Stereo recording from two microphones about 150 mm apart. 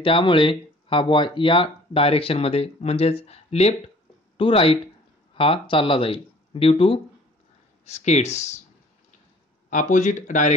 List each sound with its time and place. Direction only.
0.0 s speech: 35° left (ahead or behind)
7.8 s speech: 50° left (ahead or behind)
9.7 s speech: 55° left (ahead or behind)